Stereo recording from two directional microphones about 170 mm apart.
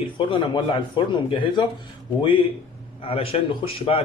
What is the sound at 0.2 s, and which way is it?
A man's voice, 30° left (ahead or behind).